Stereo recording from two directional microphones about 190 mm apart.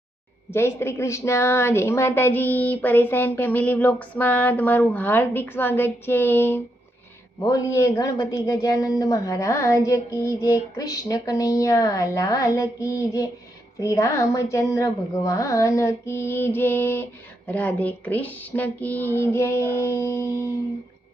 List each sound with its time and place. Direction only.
0.5 s speech: 15° left (ahead or behind)